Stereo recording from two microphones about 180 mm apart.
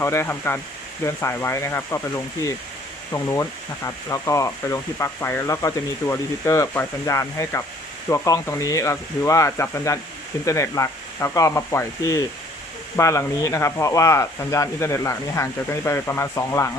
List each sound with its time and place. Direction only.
0.0 s speech: 15° left (ahead or behind)